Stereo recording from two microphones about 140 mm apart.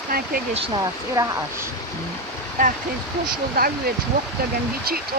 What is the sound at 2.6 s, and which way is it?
Speech, 75° right (ahead or behind).